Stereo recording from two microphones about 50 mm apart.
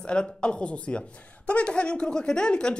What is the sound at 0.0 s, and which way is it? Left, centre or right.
Speech, left.